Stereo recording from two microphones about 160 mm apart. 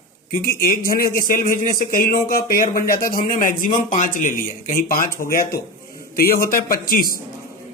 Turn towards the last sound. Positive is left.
turn(degrees=65)  # may be behind; listen again after turning